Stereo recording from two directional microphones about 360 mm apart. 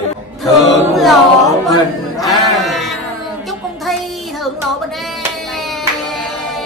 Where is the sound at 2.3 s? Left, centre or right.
Centre.